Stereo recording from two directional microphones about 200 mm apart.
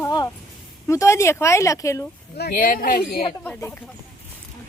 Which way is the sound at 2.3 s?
50° left (ahead or behind).